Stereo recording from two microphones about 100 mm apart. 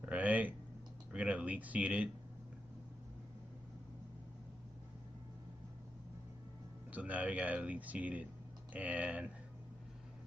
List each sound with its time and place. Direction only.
0.0 s a sound: 15° right (ahead or behind)
1.1 s speech: 15° right (ahead or behind)
6.9 s speech: 15° right (ahead or behind)